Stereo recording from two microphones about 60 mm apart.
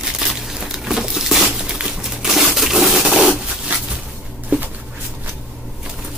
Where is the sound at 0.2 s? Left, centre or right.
Centre.